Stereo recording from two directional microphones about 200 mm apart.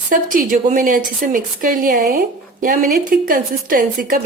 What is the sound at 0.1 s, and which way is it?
Speech, 40° right (ahead or behind).